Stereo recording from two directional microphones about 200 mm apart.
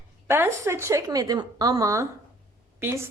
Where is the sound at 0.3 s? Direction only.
10° right (ahead or behind).